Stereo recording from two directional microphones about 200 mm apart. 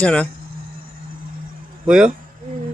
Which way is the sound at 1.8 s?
5° right (ahead or behind).